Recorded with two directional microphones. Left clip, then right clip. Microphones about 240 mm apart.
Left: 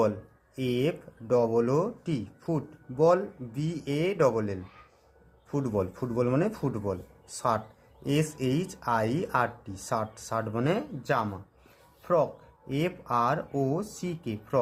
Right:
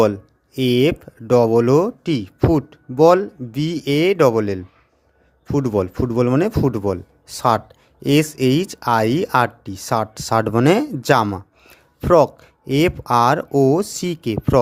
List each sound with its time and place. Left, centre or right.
0.5 s speech: right